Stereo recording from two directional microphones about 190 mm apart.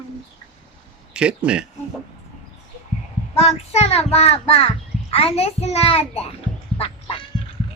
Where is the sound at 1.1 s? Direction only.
5° right (ahead or behind).